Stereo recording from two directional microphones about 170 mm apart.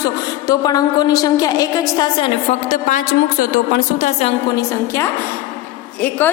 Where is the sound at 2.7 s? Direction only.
50° left (ahead or behind).